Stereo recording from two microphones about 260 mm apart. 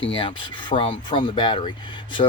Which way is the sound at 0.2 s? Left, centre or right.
Centre.